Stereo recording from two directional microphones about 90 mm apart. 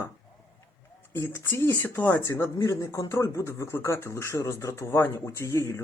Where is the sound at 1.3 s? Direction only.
25° left (ahead or behind).